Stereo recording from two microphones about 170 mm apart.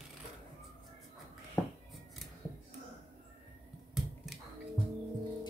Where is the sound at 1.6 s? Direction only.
10° left (ahead or behind).